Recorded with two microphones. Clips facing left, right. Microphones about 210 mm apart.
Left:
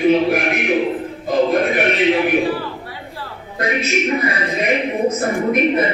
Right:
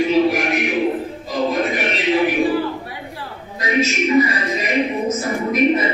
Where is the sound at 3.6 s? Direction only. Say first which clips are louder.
Even; 55° left (ahead or behind).